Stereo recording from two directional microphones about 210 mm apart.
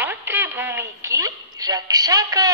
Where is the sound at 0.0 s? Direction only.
10° right (ahead or behind).